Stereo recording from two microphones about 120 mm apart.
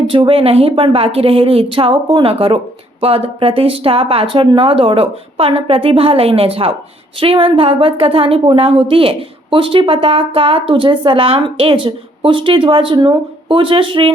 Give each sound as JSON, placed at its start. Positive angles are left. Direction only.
{"t": 0.1, "sound": "a woman's voice", "side_deg": -45}